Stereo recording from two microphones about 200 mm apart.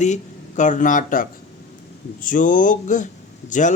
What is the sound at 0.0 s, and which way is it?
Speech, 35° left (ahead or behind).